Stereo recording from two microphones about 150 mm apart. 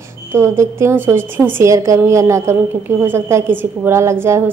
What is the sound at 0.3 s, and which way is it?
A woman's voice, 20° right (ahead or behind).